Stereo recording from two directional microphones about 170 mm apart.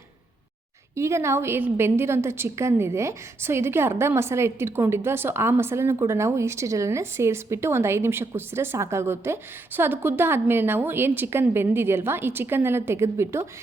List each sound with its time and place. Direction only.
0.9 s a woman's voice: 15° right (ahead or behind)